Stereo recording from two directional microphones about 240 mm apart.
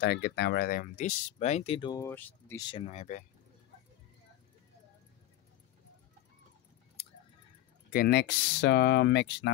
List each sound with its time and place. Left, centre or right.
0.0 s speech: left; by 2.6 s centre
2.7 s speech: left
7.9 s speech: left